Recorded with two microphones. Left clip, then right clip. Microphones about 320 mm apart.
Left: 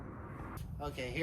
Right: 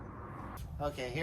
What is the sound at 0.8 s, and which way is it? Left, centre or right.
Speech, centre.